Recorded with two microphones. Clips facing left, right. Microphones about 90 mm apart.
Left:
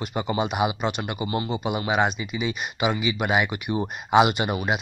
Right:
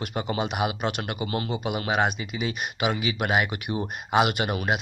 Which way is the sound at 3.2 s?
Centre (ahead or behind).